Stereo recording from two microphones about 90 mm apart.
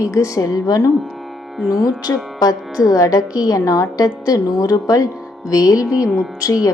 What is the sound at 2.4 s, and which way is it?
Speech, 45° left (ahead or behind).